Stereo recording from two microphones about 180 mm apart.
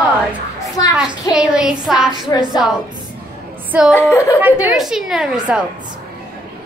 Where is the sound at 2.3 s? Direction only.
20° left (ahead or behind).